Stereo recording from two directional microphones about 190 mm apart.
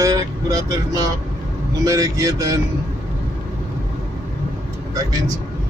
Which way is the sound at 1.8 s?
20° right (ahead or behind).